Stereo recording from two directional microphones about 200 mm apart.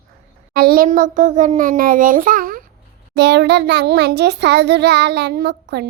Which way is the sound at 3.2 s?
60° right (ahead or behind).